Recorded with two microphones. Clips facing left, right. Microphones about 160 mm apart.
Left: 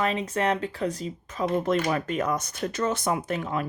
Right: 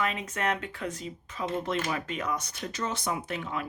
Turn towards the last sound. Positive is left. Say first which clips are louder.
# left 5 dB
turn(degrees=45)  # may be behind; listen again after turning